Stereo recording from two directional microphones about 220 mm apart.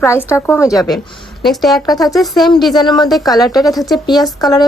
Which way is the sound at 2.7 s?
20° left (ahead or behind).